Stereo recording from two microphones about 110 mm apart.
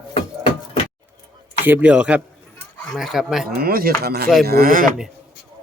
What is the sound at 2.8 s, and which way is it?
Speech, centre (ahead or behind).